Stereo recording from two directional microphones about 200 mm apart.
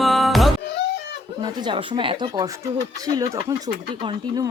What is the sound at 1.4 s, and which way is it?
Speech, 20° right (ahead or behind).